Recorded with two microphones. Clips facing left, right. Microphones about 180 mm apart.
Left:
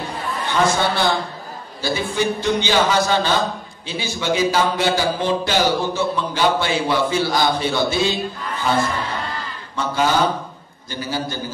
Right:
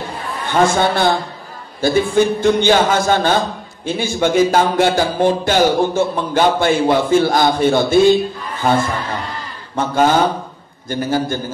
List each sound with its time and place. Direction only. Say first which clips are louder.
0.5 s a man's voice: right 5 dB; 50° right (ahead or behind)